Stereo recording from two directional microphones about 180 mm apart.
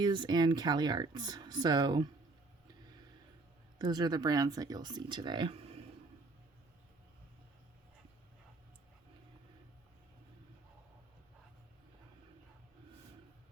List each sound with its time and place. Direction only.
0.0 s speech: 25° right (ahead or behind)
3.8 s speech: 25° right (ahead or behind)